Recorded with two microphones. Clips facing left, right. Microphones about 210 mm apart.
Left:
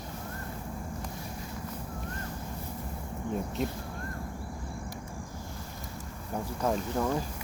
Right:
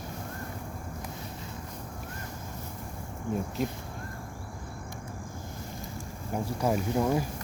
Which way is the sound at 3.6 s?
Centre (ahead or behind).